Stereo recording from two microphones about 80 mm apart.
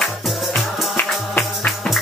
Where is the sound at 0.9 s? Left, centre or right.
Left.